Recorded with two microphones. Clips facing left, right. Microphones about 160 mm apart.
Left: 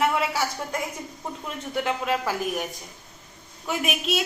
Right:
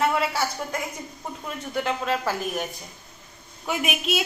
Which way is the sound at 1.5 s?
20° left (ahead or behind).